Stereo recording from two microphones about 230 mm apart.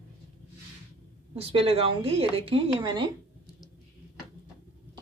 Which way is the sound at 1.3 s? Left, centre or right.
Right.